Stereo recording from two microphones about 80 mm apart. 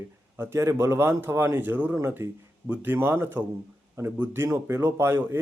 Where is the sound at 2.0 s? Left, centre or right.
Right.